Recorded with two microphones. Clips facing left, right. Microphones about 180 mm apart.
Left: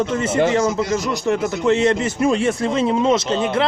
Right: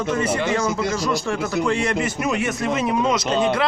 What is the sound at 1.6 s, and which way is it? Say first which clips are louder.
A man's voice: left 9 dB; 25° left (ahead or behind).